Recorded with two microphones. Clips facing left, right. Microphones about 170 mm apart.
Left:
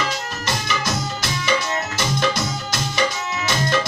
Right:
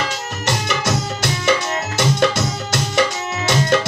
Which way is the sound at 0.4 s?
75° right (ahead or behind).